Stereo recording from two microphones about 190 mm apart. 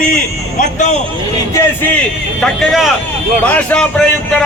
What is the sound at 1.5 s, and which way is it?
Speech, 10° left (ahead or behind).